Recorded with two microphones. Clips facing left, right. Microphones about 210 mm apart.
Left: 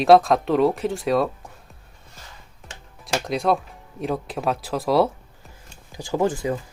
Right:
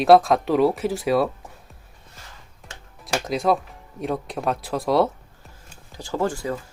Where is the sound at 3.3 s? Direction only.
Centre (ahead or behind).